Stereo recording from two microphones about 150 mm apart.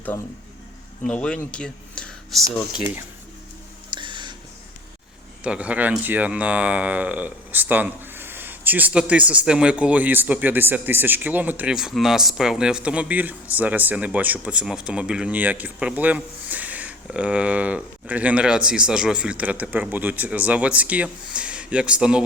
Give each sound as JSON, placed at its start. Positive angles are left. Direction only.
{"t": 1.0, "sound": "speech", "side_deg": 5}
{"t": 3.9, "sound": "a sound", "side_deg": -30}
{"t": 5.4, "sound": "speech", "side_deg": -10}